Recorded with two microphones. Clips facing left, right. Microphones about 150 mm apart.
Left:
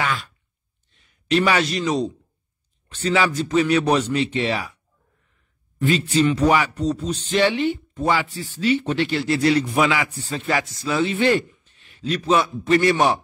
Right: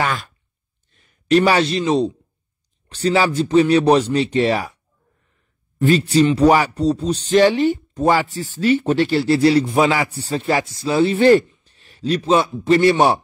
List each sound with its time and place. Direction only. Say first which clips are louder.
0.0 s speech: right 3 dB; 45° right (ahead or behind)
0.9 s a sound: right 6 dB; 50° right (ahead or behind)
1.4 s speech: right 4 dB; 30° right (ahead or behind)
5.8 s a man's voice: right 5 dB; 40° right (ahead or behind)